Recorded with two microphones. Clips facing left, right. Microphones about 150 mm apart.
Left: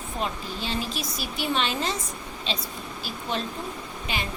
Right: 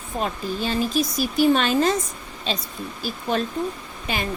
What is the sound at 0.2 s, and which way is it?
Speech, 45° right (ahead or behind).